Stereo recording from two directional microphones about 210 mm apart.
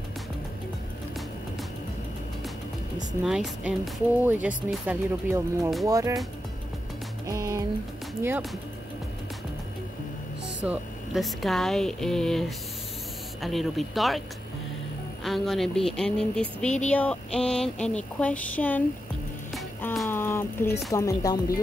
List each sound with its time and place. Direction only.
3.3 s speech: centre (ahead or behind)
7.2 s speech: 15° right (ahead or behind)
10.6 s speech: 5° right (ahead or behind)
15.2 s speech: centre (ahead or behind)
19.5 s music: centre (ahead or behind)
20.9 s speech: 15° left (ahead or behind)